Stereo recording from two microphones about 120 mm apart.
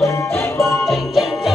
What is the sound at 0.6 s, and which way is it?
Music, centre (ahead or behind).